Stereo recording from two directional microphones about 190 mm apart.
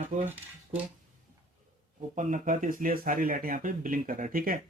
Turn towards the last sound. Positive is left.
turn(degrees=-45)  # may be behind; listen again after turning